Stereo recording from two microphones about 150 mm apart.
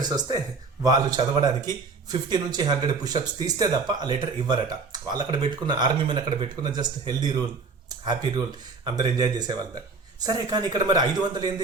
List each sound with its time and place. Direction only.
0.0 s speech: 30° right (ahead or behind)